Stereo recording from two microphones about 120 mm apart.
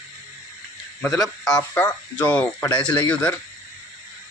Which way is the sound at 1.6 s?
15° left (ahead or behind).